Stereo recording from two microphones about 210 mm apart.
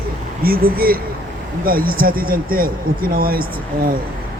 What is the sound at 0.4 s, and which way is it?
Speech, 45° right (ahead or behind).